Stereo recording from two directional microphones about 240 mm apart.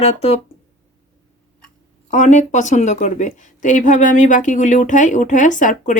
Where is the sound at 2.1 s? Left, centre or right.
Left.